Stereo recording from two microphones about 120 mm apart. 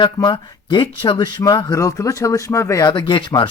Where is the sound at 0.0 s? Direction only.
35° left (ahead or behind).